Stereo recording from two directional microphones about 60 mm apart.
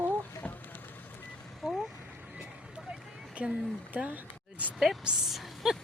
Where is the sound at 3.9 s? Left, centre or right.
Right.